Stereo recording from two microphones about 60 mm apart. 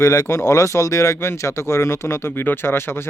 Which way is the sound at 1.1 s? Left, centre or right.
Left.